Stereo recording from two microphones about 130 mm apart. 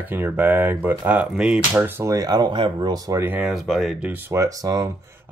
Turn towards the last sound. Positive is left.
turn(degrees=-30)  # may be behind; listen again after turning